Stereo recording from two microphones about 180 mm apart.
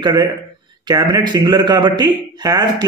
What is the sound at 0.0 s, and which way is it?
A man's voice, 25° right (ahead or behind).